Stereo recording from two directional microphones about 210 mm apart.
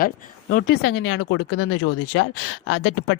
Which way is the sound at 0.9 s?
90° left.